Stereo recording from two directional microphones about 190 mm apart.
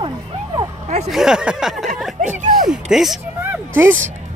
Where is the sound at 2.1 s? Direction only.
40° right (ahead or behind).